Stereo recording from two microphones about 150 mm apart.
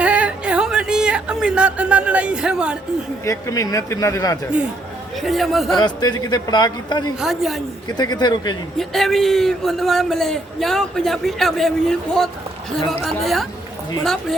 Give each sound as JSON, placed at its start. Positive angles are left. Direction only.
{"t": 0.0, "sound": "a sound", "side_deg": -10}
{"t": 3.2, "sound": "a man's voice", "side_deg": 20}
{"t": 5.2, "sound": "a man's voice", "side_deg": 0}
{"t": 5.8, "sound": "a man's voice", "side_deg": 30}
{"t": 7.2, "sound": "a man's voice", "side_deg": 0}
{"t": 7.9, "sound": "a man's voice", "side_deg": 30}
{"t": 8.8, "sound": "a man's voice", "side_deg": 0}